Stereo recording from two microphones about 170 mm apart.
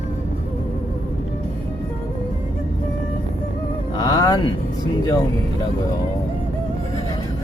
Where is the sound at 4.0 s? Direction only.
25° left (ahead or behind).